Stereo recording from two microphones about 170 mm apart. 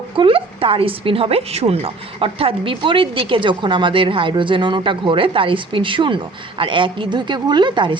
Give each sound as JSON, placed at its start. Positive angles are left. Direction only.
{"t": 0.2, "sound": "speech", "side_deg": -30}